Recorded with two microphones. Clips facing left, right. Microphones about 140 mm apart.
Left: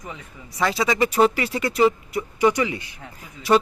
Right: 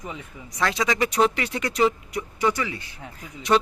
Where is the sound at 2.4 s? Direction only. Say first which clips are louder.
Left 5 dB; 15° left (ahead or behind).